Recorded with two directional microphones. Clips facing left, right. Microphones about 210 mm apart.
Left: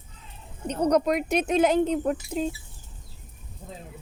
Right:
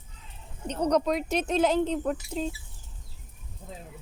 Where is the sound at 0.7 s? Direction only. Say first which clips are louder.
Left 3 dB; 10° left (ahead or behind).